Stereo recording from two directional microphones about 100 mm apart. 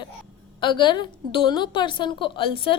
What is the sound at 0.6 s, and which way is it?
A woman's voice, 50° left (ahead or behind).